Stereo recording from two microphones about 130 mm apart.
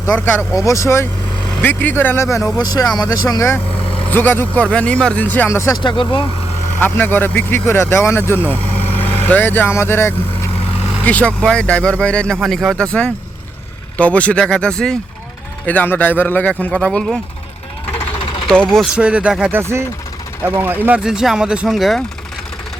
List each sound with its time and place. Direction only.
0.5 s speech: 25° left (ahead or behind)
5.7 s speech: 35° left (ahead or behind)
6.7 s speech: 15° left (ahead or behind)
18.9 s speech: 10° right (ahead or behind)
20.8 s speech: 10° right (ahead or behind)